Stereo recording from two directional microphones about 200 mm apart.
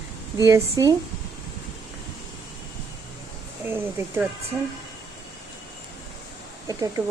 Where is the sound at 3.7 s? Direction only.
10° right (ahead or behind).